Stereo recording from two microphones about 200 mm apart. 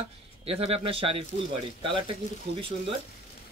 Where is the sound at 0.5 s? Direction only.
30° right (ahead or behind).